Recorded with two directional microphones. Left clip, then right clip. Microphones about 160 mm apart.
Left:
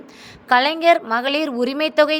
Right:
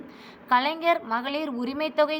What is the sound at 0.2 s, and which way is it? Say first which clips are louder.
A woman's voice: left 7 dB; 40° left (ahead or behind).